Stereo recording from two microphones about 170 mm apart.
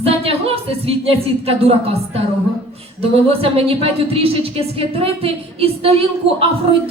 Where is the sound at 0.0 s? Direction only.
35° right (ahead or behind).